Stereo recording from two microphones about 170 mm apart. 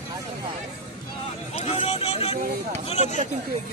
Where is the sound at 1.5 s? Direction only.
35° left (ahead or behind).